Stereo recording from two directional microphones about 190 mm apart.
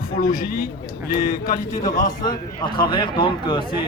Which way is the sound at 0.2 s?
45° left (ahead or behind).